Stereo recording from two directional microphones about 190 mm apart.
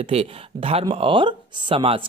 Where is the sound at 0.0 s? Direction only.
30° right (ahead or behind).